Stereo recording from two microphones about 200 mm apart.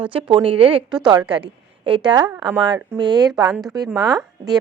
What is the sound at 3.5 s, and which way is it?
A woman's voice, centre (ahead or behind).